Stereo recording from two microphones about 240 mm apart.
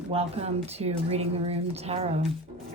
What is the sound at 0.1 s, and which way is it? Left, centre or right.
A woman's voice, right.